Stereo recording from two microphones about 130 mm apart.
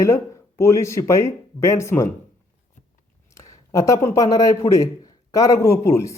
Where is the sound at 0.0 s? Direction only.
25° left (ahead or behind).